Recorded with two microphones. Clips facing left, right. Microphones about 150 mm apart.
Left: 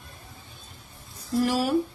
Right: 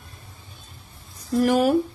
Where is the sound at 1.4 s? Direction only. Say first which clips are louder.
Right 5 dB; 55° right (ahead or behind).